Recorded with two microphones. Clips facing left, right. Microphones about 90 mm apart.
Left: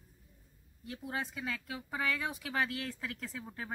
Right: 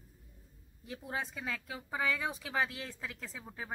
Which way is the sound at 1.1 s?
5° right (ahead or behind).